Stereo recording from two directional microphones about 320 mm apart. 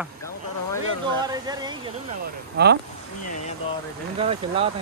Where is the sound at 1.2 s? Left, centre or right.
Centre.